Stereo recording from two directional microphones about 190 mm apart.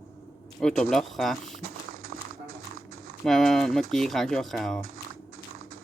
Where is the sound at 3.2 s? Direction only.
Centre (ahead or behind).